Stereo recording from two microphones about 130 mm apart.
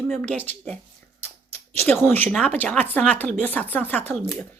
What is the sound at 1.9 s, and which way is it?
A woman's voice, 15° left (ahead or behind).